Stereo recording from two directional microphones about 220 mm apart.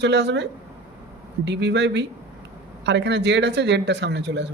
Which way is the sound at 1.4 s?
50° right (ahead or behind).